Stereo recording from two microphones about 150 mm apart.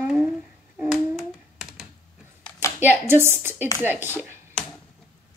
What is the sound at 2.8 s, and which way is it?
Speech, 15° right (ahead or behind).